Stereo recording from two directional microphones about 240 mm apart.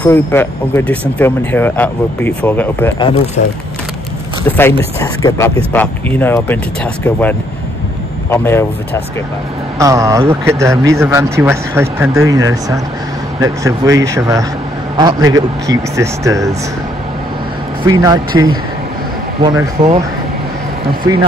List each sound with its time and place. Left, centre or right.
0.0 s speech: centre
3.4 s speech: left
4.5 s speech: centre
9.8 s speech: centre
17.8 s speech: centre